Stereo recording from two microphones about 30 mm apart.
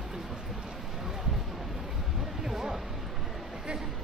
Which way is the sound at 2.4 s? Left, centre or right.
Centre.